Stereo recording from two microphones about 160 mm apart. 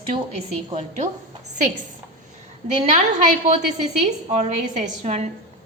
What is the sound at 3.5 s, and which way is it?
A woman's voice, 45° right (ahead or behind).